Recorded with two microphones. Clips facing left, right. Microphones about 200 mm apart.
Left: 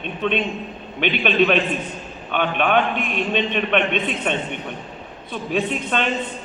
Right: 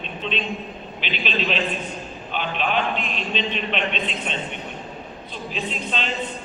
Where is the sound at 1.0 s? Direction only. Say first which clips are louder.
Left 9 dB; 55° left (ahead or behind).